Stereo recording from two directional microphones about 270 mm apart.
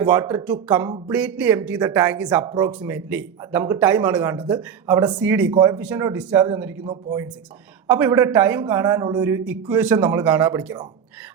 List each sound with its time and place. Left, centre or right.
0.0 s a man's voice: centre
6.8 s a man's voice: centre